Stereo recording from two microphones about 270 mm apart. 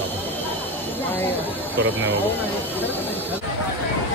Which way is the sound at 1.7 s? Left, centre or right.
Centre.